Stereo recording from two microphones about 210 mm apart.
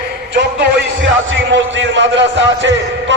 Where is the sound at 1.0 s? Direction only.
60° right (ahead or behind).